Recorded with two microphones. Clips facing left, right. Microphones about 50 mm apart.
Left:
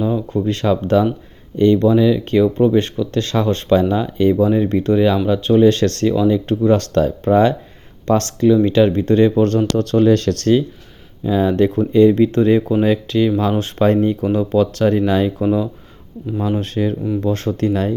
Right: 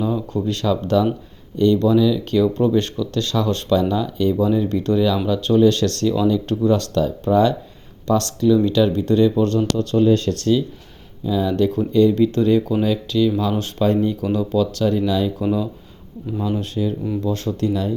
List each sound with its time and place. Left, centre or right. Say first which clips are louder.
0.0 s a sound: left 3 dB; centre
0.4 s speech: left 3 dB; left
6.7 s speech: left 4 dB; left
11.3 s speech: left 4 dB; left